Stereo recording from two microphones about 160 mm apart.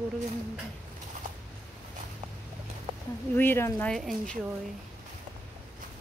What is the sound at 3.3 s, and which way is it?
Speech, 15° left (ahead or behind).